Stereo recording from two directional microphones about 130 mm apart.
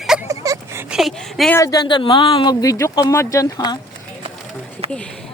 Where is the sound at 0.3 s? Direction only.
25° right (ahead or behind).